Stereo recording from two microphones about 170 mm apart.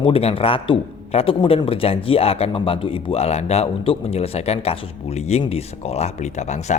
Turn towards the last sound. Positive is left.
turn(degrees=45)  # may be behind; listen again after turning